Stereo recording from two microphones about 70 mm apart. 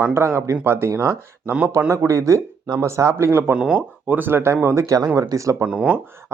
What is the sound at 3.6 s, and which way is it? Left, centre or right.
Speech, centre.